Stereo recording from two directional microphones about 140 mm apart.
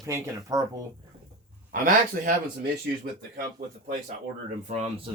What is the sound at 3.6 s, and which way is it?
Speech, 90° right.